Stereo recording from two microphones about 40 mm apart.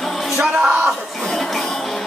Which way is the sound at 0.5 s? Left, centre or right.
Right.